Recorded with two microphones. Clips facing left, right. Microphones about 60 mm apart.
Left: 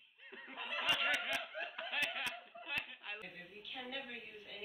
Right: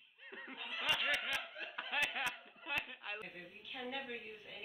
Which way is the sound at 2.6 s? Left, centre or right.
Centre.